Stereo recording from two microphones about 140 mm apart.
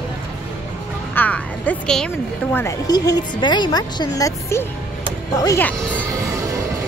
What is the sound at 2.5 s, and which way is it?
A woman's voice, 25° left (ahead or behind).